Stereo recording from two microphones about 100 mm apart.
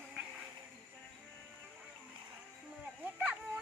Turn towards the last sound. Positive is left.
turn(degrees=-15)  # may be behind; listen again after turning